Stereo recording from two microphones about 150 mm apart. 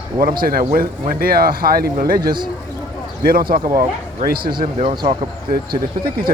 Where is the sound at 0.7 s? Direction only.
75° right (ahead or behind).